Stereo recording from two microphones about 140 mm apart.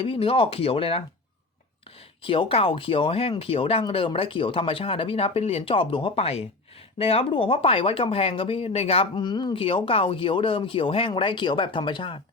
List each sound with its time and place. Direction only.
0.0 s speech: 40° left (ahead or behind)
2.2 s speech: 40° left (ahead or behind)